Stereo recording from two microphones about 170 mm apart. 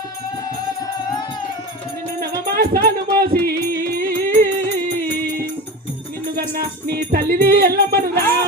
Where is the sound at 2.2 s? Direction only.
65° right (ahead or behind).